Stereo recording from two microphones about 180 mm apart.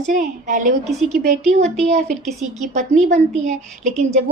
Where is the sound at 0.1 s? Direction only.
45° right (ahead or behind).